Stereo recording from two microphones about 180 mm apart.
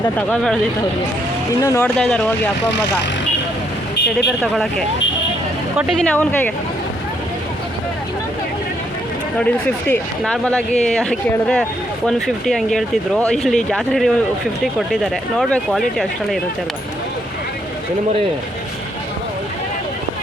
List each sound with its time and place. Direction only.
0.2 s speech: 5° left (ahead or behind)
1.6 s speech: 15° left (ahead or behind)
2.0 s speech: 5° left (ahead or behind)
6.0 s speech: 10° left (ahead or behind)
9.4 s speech: 10° left (ahead or behind)